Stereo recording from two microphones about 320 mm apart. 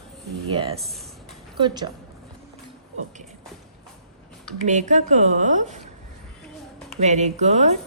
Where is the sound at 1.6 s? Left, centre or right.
Centre.